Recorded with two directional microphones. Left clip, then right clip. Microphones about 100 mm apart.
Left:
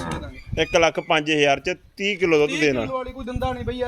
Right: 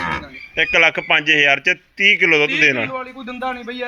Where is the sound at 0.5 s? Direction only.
20° left (ahead or behind).